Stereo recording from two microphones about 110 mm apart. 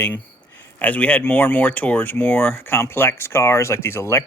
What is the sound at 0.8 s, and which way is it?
Speech, 15° left (ahead or behind).